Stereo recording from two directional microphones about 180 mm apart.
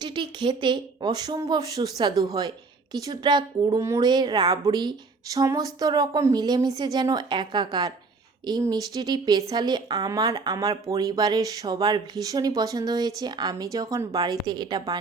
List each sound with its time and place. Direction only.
0.0 s speech: 25° right (ahead or behind)